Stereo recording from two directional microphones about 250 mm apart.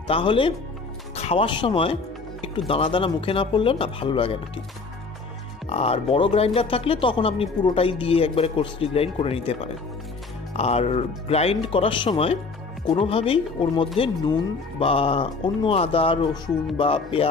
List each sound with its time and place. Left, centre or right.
0.1 s speech: left
5.7 s speech: left